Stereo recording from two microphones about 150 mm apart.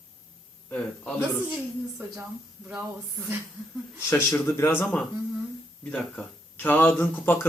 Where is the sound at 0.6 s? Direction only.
10° left (ahead or behind).